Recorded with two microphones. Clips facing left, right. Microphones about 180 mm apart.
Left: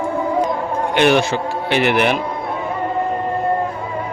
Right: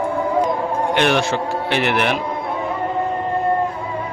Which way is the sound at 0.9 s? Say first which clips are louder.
Left 5 dB; centre (ahead or behind).